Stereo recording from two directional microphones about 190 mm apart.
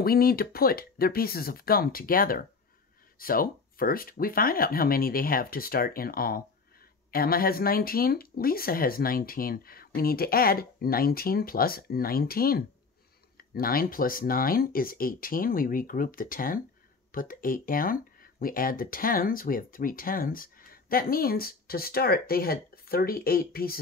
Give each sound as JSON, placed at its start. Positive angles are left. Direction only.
{"t": 0.0, "sound": "speech", "side_deg": 50}